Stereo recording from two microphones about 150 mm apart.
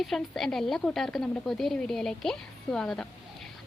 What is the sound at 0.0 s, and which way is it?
A woman's voice, centre (ahead or behind).